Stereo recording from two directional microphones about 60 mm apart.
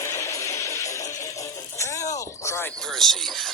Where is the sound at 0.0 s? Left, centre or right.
Left.